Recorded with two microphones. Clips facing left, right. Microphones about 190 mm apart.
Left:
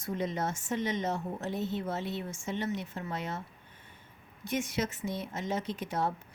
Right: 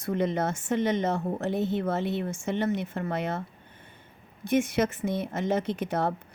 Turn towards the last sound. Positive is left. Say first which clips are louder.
# right 5 dB
turn(degrees=-60)  # may be behind; listen again after turning